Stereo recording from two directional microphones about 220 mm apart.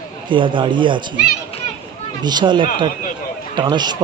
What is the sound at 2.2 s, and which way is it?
Speech, 20° right (ahead or behind).